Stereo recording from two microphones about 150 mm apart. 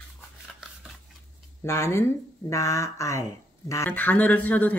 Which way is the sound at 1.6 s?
20° left (ahead or behind).